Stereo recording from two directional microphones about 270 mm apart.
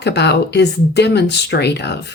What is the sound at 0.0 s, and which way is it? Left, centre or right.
Speech, left.